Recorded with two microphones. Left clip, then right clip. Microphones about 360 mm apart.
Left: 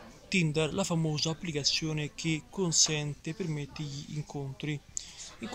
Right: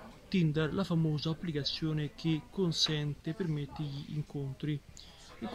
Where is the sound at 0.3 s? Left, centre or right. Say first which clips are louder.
Left 4 dB; centre.